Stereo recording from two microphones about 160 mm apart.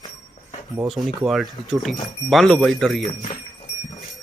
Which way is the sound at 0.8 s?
Centre (ahead or behind).